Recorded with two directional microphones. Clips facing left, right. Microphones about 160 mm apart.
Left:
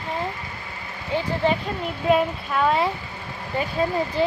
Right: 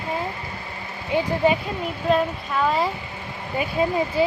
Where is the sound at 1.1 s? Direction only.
15° right (ahead or behind).